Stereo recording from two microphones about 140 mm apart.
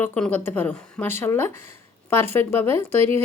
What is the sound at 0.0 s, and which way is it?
A woman's voice, 10° left (ahead or behind).